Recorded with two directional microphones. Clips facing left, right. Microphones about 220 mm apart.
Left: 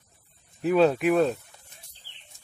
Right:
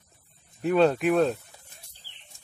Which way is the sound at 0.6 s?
Centre (ahead or behind).